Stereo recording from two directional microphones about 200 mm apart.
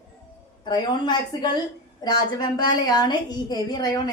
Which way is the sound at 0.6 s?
20° left (ahead or behind).